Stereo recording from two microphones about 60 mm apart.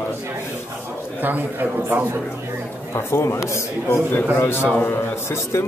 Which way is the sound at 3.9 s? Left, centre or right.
Left.